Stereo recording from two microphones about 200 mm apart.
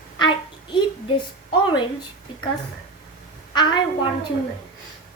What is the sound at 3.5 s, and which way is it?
Speech, 25° left (ahead or behind).